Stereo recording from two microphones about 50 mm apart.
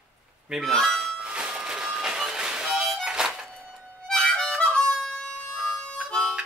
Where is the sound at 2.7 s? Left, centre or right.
Centre.